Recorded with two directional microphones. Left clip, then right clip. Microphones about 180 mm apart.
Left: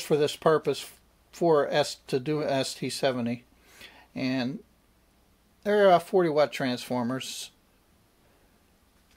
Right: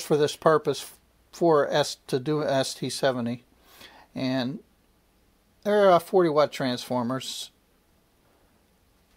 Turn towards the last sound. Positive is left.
turn(degrees=-30)  # may be behind; listen again after turning